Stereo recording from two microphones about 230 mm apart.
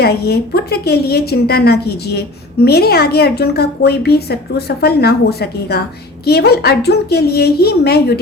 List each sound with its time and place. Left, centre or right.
0.0 s a woman's voice: left